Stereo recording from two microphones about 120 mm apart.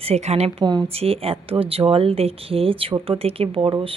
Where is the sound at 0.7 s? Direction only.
40° right (ahead or behind).